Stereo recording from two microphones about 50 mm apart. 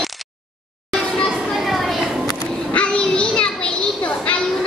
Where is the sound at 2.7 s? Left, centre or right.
Left.